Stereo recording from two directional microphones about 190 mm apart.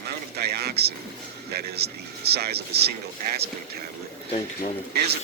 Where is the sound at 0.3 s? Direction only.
55° right (ahead or behind).